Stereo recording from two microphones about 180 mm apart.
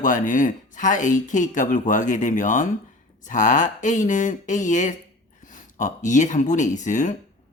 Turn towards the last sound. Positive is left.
turn(degrees=45)  # may be behind; listen again after turning